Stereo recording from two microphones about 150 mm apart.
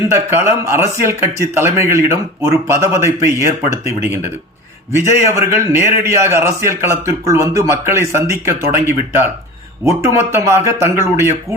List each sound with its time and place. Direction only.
0.1 s a man's voice: 20° right (ahead or behind)